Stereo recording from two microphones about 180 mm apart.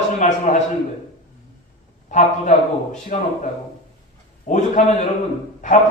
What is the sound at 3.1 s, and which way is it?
Speech, 45° left (ahead or behind).